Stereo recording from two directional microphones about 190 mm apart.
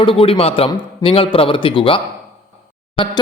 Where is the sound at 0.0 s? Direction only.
30° left (ahead or behind).